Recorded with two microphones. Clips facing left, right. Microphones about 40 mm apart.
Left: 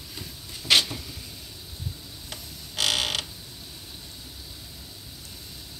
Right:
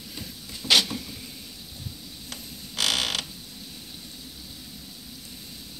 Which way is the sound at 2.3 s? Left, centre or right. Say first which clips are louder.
Right 1 dB; left.